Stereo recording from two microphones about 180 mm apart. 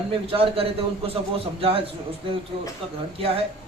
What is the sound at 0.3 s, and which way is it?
Speech, 30° right (ahead or behind).